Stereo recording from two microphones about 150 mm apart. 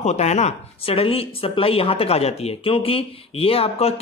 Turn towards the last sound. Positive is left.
turn(degrees=40)  # may be behind; listen again after turning